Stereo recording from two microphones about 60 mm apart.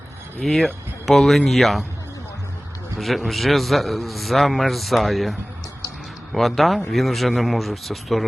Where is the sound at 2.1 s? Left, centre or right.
Left.